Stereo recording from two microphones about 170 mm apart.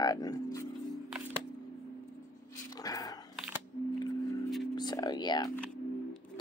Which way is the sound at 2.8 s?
20° left (ahead or behind).